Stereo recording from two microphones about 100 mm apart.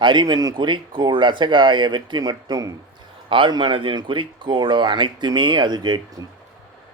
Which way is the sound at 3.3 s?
50° right (ahead or behind).